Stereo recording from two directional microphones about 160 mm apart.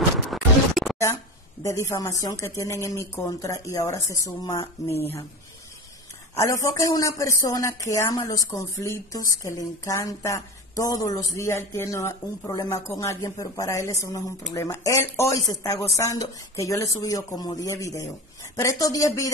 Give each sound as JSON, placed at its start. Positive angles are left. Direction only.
{"t": 0.3, "sound": "scratch", "side_deg": 0}
{"t": 1.6, "sound": "speech", "side_deg": 20}
{"t": 6.3, "sound": "speech", "side_deg": 20}